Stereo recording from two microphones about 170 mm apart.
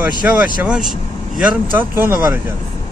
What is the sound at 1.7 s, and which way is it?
Speech, 15° right (ahead or behind).